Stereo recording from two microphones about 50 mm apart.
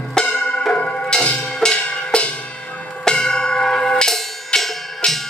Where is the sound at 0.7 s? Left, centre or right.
Left.